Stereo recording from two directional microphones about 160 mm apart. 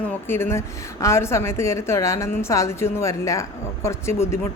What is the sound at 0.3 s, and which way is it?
A woman's voice, 15° left (ahead or behind).